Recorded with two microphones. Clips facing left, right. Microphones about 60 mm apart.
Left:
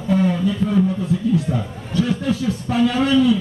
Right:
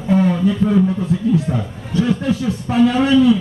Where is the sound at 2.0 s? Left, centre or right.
Centre.